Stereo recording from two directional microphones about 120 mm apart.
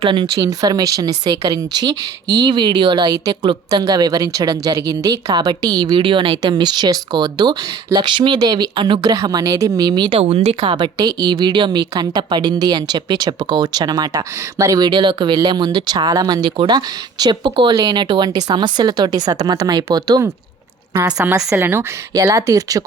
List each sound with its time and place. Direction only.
0.0 s speech: 45° right (ahead or behind)
0.3 s speech: 30° right (ahead or behind)
10.2 s speech: 60° right (ahead or behind)
10.6 s speech: 40° right (ahead or behind)
20.9 s a woman's voice: 20° right (ahead or behind)